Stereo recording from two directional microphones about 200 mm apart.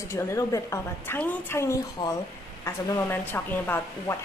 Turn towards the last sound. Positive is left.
turn(degrees=10)  # may be behind; listen again after turning